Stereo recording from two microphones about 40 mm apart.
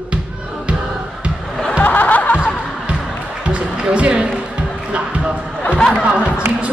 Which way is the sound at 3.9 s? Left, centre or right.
Right.